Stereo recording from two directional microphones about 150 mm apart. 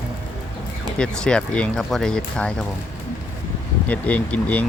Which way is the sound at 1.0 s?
5° left (ahead or behind).